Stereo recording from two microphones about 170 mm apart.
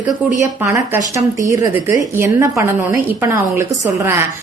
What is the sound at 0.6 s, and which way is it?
A woman's voice, 15° right (ahead or behind).